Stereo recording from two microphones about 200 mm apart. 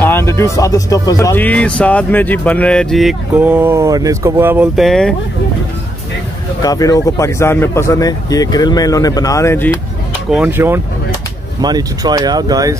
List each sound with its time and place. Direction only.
0.0 s speech: 10° left (ahead or behind); by 4.6 s 10° right (ahead or behind)
4.7 s speech: centre (ahead or behind)
6.6 s speech: 20° left (ahead or behind)
10.3 s speech: 10° right (ahead or behind)